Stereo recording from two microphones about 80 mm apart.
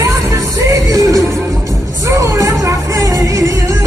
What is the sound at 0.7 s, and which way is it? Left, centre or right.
Music, right.